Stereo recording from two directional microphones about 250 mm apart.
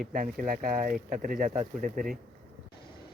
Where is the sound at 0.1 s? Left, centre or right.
Right.